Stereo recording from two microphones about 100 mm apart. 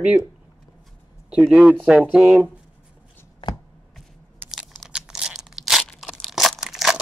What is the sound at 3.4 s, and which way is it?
Chopping, 50° left (ahead or behind).